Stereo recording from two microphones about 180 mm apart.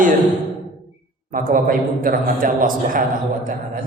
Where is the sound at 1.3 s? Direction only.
50° right (ahead or behind).